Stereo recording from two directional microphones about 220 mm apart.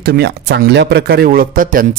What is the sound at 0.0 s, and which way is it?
Speech, 50° right (ahead or behind).